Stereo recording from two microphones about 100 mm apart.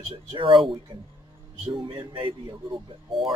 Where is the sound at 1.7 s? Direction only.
55° right (ahead or behind).